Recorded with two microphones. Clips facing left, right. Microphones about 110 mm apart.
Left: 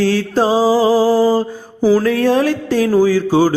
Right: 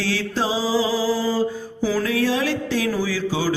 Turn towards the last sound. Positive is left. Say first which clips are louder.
# left 11 dB
turn(degrees=50)  # may be behind; listen again after turning